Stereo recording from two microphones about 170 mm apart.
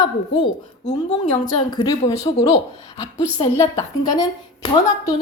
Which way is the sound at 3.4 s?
35° left (ahead or behind).